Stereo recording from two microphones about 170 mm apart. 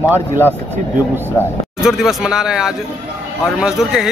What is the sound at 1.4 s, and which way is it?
Speech, 15° left (ahead or behind).